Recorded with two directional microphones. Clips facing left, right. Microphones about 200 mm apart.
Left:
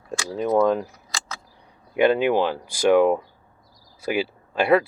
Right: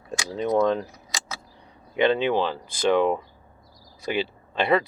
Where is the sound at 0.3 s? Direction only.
5° left (ahead or behind).